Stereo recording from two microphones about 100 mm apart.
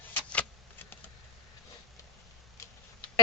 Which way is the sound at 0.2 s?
15° left (ahead or behind).